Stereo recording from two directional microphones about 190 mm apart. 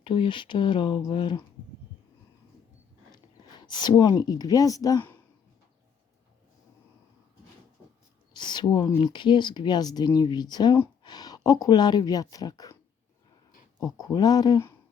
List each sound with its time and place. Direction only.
0.0 s speech: 25° left (ahead or behind)
3.6 s speech: 20° left (ahead or behind)
8.3 s speech: 25° left (ahead or behind)
13.7 s speech: 20° left (ahead or behind)